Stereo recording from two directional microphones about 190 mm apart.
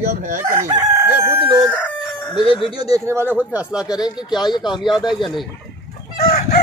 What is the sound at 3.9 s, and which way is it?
Speech, 20° left (ahead or behind).